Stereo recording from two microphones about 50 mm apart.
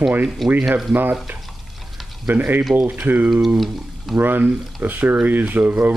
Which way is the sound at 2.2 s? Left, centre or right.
Right.